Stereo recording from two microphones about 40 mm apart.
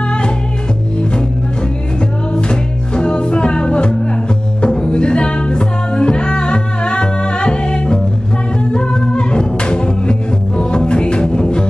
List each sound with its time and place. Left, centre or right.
2.3 s music: left